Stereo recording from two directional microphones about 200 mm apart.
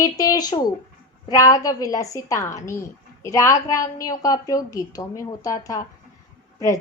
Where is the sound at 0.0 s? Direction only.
15° left (ahead or behind).